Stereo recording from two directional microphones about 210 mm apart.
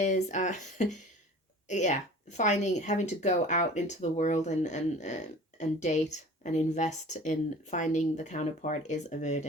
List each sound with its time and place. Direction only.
0.0 s a woman's voice: 35° left (ahead or behind)